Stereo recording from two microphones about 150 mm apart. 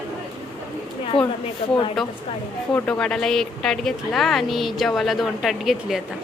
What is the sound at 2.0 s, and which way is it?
A woman's voice, centre (ahead or behind).